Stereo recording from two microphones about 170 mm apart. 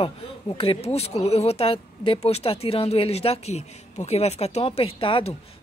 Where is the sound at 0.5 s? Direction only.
30° left (ahead or behind).